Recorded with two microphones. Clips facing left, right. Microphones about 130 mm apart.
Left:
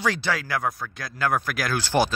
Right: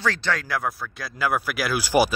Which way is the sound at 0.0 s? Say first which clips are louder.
Even; 10° left (ahead or behind).